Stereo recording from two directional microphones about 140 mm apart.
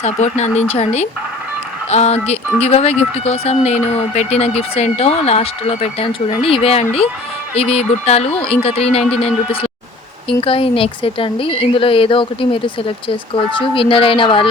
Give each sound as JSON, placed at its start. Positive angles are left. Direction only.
{"t": 0.0, "sound": "a woman's voice", "side_deg": 55}